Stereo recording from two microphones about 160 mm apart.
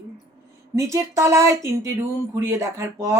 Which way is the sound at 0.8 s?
20° right (ahead or behind).